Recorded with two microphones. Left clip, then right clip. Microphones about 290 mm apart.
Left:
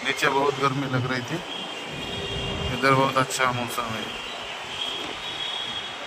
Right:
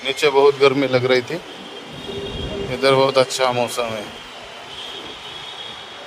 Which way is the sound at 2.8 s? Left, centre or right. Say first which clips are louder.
Right 6 dB; right.